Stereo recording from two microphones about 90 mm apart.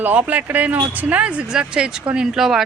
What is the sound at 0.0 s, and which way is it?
Speech, 15° right (ahead or behind).